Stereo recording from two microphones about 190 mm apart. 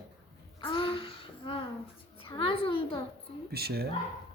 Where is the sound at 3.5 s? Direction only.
55° right (ahead or behind).